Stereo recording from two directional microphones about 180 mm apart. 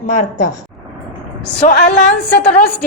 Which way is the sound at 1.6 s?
45° left (ahead or behind).